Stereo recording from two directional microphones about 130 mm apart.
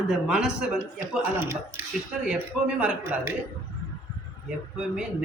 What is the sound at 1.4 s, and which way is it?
A man's voice, 15° right (ahead or behind).